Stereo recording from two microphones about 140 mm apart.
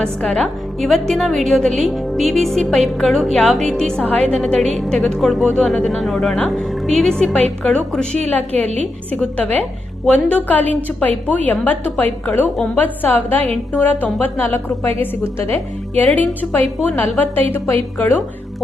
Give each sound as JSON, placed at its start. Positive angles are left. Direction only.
{"t": 0.0, "sound": "a woman's voice", "side_deg": 5}